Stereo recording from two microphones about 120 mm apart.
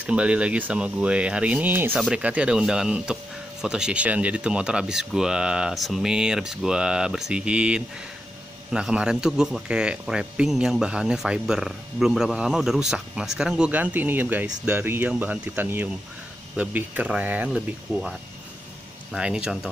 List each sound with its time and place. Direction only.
0.0 s a man's voice: 10° right (ahead or behind)
19.1 s speech: 5° right (ahead or behind)